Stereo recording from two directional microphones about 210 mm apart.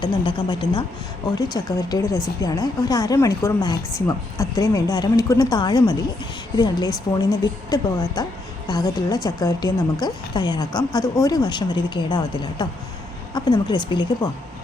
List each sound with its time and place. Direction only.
0.0 s a woman's voice: 20° left (ahead or behind)